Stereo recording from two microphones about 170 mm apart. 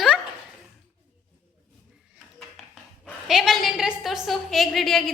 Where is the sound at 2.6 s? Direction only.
Centre (ahead or behind).